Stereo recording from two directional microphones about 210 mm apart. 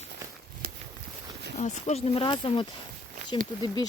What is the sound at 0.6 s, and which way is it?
Walk, 45° right (ahead or behind).